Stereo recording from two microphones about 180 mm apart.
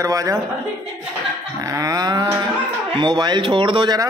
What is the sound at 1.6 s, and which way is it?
Speech, 20° right (ahead or behind).